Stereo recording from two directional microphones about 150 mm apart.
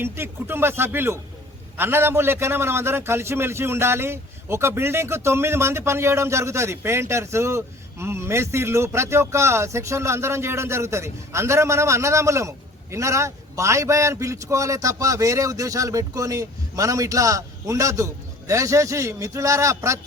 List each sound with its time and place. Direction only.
0.0 s a man's voice: 15° right (ahead or behind)